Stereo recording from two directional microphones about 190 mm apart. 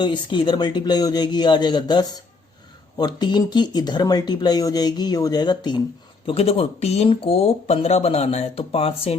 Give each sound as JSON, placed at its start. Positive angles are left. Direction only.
{"t": 0.0, "sound": "speech", "side_deg": 25}